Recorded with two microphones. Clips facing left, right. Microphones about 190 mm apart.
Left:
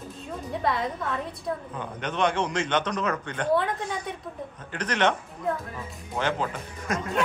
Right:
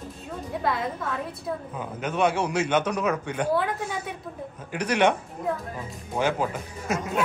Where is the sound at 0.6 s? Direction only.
Centre (ahead or behind).